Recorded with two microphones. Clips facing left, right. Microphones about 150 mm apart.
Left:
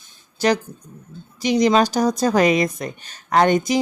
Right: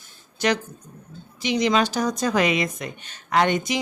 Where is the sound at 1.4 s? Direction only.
40° left (ahead or behind).